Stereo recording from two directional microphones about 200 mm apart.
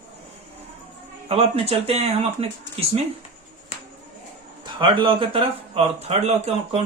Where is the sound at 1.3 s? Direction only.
30° right (ahead or behind).